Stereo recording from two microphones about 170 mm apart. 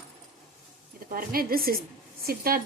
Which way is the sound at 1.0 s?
60° right (ahead or behind).